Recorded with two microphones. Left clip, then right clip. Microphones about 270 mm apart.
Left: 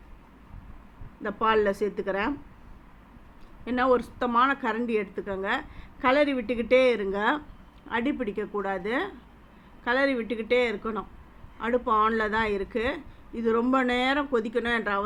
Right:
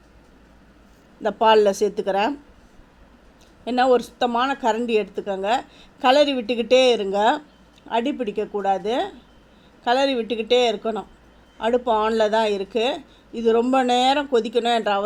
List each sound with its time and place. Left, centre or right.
1.2 s a woman's voice: centre
3.6 s a woman's voice: centre